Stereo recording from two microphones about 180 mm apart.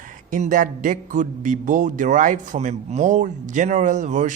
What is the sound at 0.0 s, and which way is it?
Speech, 45° right (ahead or behind).